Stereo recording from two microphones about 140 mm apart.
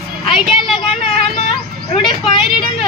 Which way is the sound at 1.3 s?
55° left (ahead or behind).